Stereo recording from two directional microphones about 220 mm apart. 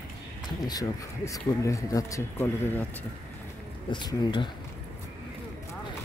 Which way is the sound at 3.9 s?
20° left (ahead or behind).